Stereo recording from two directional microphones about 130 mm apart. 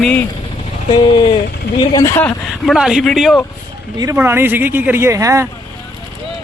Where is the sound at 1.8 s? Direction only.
25° left (ahead or behind).